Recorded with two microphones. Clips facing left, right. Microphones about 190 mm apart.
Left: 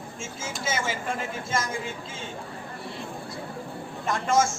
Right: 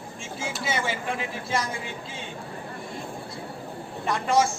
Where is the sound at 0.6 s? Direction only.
45° left (ahead or behind).